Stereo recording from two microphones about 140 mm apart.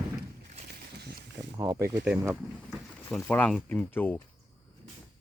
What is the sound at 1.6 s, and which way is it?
Speech, 20° right (ahead or behind).